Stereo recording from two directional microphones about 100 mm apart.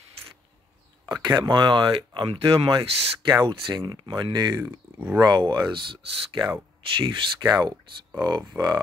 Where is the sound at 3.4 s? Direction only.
45° right (ahead or behind).